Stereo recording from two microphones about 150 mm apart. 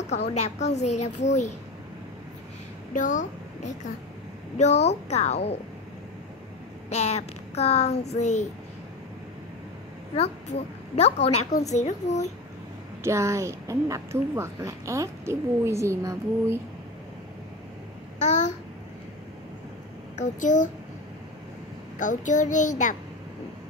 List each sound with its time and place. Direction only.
0.0 s speech: 50° left (ahead or behind)
2.9 s a woman's voice: 60° left (ahead or behind)
6.9 s speech: 45° left (ahead or behind)
11.0 s speech: 45° left (ahead or behind)
13.0 s a woman's voice: 20° right (ahead or behind)
18.2 s speech: 50° left (ahead or behind)
20.2 s a child's voice: 55° left (ahead or behind)
21.9 s a child's voice: 55° left (ahead or behind)